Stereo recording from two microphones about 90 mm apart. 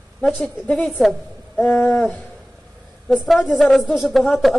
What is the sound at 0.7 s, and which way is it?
Speech, centre (ahead or behind).